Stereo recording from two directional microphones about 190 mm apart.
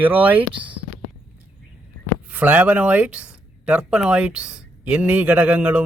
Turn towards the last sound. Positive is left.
turn(degrees=-10)  # may be behind; listen again after turning